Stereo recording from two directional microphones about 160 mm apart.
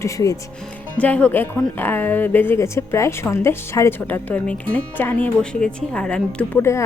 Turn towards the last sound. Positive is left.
turn(degrees=5)  # may be behind; listen again after turning